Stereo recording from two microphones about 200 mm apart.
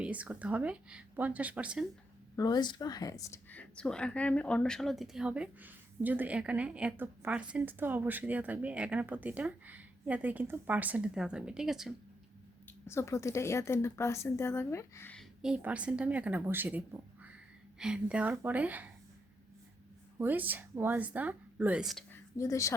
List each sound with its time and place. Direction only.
0.0 s speech: 5° right (ahead or behind)
2.3 s speech: 20° left (ahead or behind); by 11.9 s centre (ahead or behind)
12.6 s a woman's voice: 15° left (ahead or behind); by 18.9 s 10° right (ahead or behind)
20.1 s speech: 10° right (ahead or behind)
22.1 s a sound: 15° left (ahead or behind)